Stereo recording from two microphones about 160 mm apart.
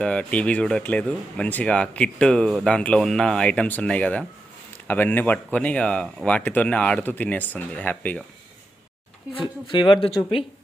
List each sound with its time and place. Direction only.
0.0 s speech: 5° left (ahead or behind)
9.4 s speech: 30° left (ahead or behind)